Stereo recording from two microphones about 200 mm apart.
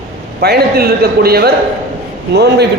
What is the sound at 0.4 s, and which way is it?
A man's voice, 50° right (ahead or behind).